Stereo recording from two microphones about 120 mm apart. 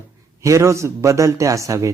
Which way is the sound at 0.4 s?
25° right (ahead or behind).